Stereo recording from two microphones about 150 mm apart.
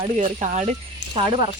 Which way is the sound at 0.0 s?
55° right (ahead or behind).